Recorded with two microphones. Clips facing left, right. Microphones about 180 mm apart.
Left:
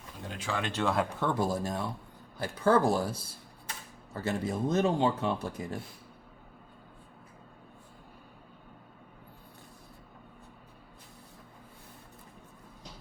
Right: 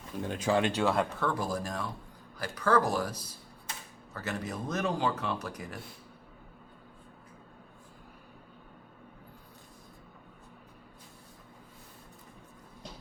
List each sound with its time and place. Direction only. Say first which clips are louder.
0.3 s speech: right 7 dB; 40° right (ahead or behind)
0.8 s speech: right 1 dB; centre (ahead or behind)
1.1 s speech: left 2 dB; 20° left (ahead or behind)